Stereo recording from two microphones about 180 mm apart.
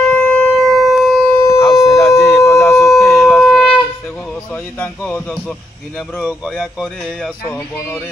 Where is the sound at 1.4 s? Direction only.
15° left (ahead or behind).